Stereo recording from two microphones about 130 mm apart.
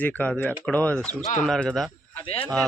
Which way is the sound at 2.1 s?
45° left (ahead or behind).